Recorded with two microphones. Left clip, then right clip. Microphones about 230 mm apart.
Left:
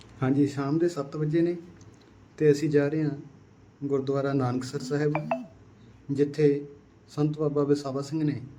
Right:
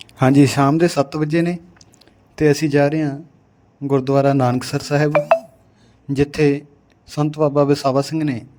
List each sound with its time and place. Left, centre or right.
0.0 s speech: right